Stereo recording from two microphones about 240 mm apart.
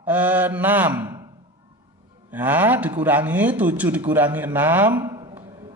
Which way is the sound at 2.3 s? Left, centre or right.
Centre.